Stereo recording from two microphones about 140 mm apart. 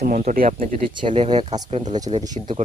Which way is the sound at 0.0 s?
85° right.